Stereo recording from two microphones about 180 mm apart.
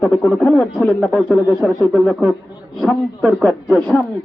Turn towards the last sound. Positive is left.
turn(degrees=0)  # may be behind; listen again after turning